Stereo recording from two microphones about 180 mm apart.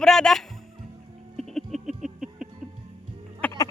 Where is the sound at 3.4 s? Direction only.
10° left (ahead or behind).